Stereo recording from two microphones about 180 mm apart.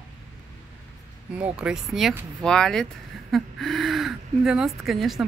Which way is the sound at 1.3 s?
5° right (ahead or behind).